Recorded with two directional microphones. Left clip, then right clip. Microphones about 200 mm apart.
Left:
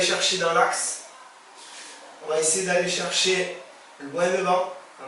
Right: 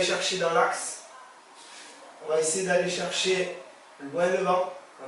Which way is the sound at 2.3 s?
10° right (ahead or behind).